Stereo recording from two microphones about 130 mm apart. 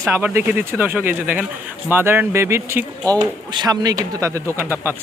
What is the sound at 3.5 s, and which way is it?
Speech, 30° right (ahead or behind).